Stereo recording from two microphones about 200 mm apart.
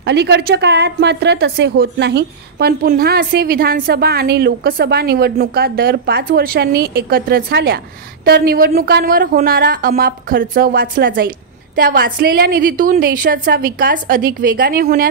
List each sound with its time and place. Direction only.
0.0 s a woman's voice: 60° right (ahead or behind)